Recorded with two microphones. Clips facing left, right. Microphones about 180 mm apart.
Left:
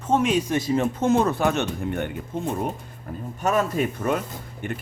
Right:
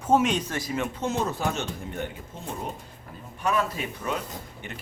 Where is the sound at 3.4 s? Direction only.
45° left (ahead or behind).